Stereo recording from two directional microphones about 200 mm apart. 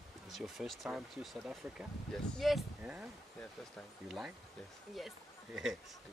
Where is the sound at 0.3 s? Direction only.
Centre (ahead or behind).